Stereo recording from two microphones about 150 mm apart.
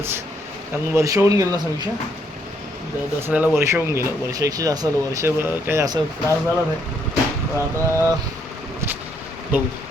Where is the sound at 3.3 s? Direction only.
15° right (ahead or behind).